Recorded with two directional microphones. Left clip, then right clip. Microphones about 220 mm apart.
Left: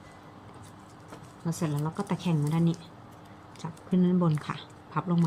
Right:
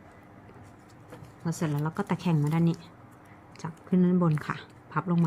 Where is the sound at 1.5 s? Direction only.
15° right (ahead or behind).